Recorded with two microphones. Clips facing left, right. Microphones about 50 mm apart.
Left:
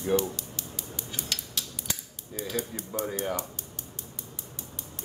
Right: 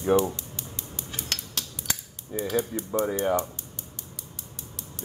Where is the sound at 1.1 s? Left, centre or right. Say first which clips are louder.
Right 2 dB; right.